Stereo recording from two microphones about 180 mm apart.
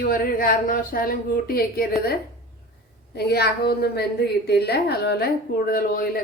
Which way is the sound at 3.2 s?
60° left (ahead or behind).